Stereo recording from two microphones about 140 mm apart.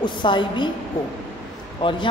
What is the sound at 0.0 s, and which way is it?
Speech, 35° left (ahead or behind).